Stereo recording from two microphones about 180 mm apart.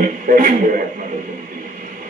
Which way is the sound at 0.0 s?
45° right (ahead or behind).